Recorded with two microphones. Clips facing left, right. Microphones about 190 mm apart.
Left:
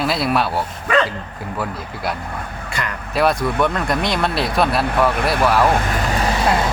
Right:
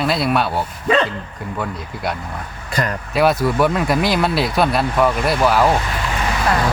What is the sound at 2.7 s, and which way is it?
Speech, 35° right (ahead or behind).